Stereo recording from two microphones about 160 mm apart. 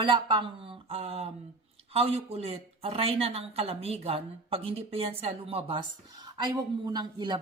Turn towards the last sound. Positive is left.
turn(degrees=-25)  # may be behind; listen again after turning